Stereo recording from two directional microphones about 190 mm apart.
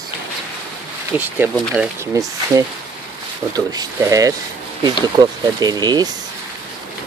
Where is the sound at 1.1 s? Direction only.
10° right (ahead or behind).